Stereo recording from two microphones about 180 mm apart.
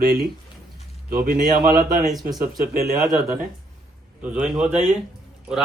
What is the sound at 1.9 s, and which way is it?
Speech, centre (ahead or behind).